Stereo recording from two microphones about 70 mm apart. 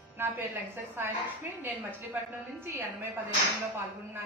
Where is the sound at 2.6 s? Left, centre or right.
Right.